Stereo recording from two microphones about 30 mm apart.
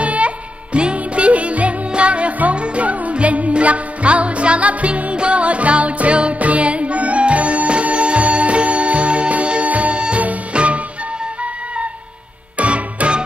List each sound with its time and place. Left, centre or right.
0.0 s music: right
5.1 s music: right
12.5 s music: right